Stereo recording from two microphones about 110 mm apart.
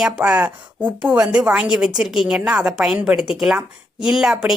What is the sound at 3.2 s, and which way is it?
A woman's voice, 5° right (ahead or behind).